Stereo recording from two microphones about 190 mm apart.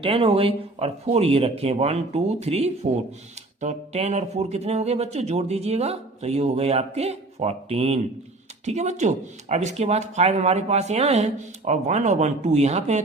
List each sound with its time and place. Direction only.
0.0 s speech: 30° right (ahead or behind)